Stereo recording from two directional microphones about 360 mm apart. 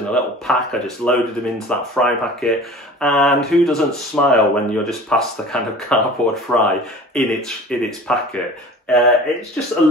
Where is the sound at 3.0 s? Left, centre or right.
Centre.